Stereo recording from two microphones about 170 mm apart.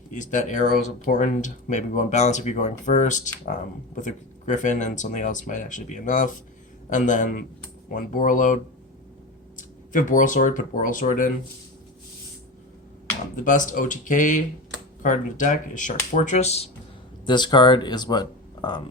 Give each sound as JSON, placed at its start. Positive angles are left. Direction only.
{"t": 0.1, "sound": "speech", "side_deg": 45}
{"t": 9.6, "sound": "speech", "side_deg": 50}
{"t": 13.3, "sound": "speech", "side_deg": 50}
{"t": 17.2, "sound": "speech", "side_deg": 25}